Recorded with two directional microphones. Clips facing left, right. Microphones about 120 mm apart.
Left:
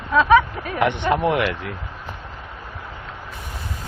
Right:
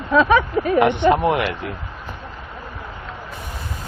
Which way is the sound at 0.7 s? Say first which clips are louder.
Right 4 dB; 25° right (ahead or behind).